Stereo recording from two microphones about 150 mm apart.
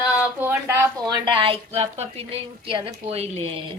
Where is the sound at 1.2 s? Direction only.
30° right (ahead or behind).